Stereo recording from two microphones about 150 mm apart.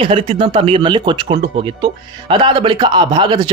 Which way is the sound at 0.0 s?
35° right (ahead or behind).